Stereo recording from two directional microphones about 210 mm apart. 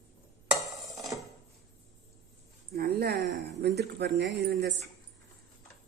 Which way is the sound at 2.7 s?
50° right (ahead or behind).